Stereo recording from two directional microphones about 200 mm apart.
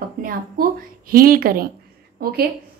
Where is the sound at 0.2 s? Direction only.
45° right (ahead or behind).